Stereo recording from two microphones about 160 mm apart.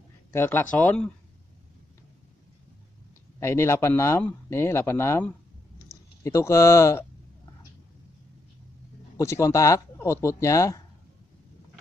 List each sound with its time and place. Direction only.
0.3 s speech: 15° left (ahead or behind)
3.3 s speech: 15° left (ahead or behind)
9.1 s speech: 20° left (ahead or behind)